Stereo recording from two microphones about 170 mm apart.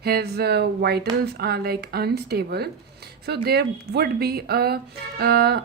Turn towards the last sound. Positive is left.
turn(degrees=-70)  # may be behind; listen again after turning